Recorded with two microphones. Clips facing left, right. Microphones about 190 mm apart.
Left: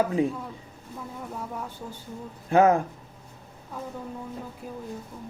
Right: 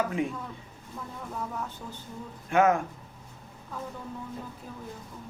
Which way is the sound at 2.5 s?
35° left (ahead or behind).